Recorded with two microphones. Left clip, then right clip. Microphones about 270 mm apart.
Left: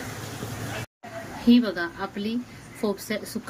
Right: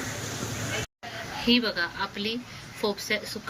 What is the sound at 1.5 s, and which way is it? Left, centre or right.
Speech, left.